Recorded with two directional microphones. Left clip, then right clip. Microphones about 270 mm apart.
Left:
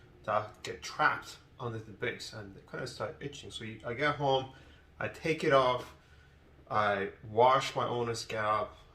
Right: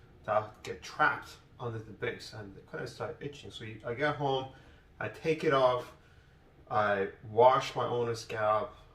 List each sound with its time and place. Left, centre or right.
0.3 s speech: centre
6.7 s speech: centre